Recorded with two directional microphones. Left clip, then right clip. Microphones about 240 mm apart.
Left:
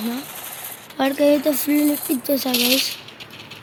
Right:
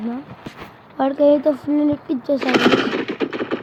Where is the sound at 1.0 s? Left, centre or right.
Centre.